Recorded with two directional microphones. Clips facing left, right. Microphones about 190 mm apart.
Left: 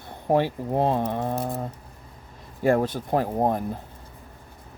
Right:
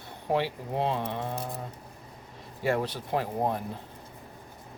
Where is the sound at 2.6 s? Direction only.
50° left (ahead or behind).